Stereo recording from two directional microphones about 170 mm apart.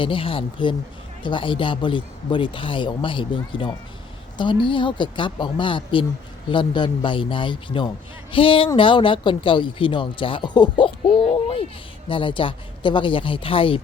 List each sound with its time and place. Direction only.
0.0 s a man's voice: 30° left (ahead or behind)
11.3 s a sound: 35° left (ahead or behind)
12.0 s speech: 30° left (ahead or behind)